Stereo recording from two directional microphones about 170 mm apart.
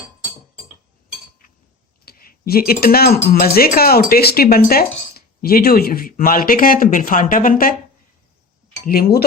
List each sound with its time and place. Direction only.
2.0 s speech: 60° left (ahead or behind)
8.9 s speech: 65° left (ahead or behind)